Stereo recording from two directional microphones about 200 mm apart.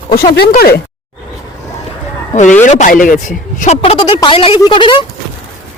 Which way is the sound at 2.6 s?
35° left (ahead or behind).